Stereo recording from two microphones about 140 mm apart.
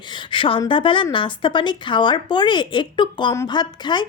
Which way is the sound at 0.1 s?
35° left (ahead or behind).